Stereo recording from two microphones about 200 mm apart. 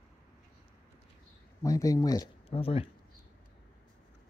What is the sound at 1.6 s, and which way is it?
Speech, 15° left (ahead or behind).